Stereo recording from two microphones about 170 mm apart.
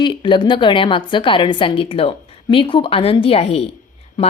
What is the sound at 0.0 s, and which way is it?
A woman's voice, 30° left (ahead or behind).